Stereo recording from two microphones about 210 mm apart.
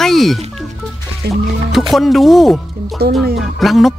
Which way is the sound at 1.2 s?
50° right (ahead or behind).